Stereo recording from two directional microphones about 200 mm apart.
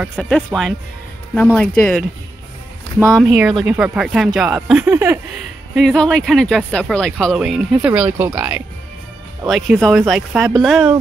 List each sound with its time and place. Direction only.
0.0 s speech: 5° left (ahead or behind)
3.2 s speech: centre (ahead or behind)
5.8 s speech: centre (ahead or behind)